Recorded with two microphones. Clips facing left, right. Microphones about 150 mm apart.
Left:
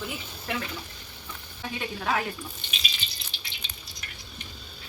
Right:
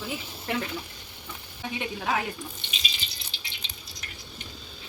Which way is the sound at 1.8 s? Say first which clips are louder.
Even; 15° right (ahead or behind).